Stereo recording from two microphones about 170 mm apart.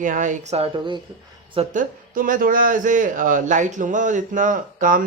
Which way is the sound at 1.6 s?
50° right (ahead or behind).